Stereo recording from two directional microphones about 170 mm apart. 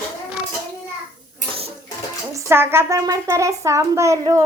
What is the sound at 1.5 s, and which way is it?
Bathtub, 35° right (ahead or behind).